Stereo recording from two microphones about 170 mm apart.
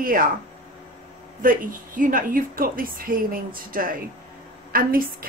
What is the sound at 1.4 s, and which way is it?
A woman's voice, 55° right (ahead or behind).